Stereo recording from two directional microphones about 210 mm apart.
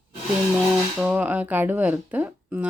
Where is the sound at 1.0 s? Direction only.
5° right (ahead or behind).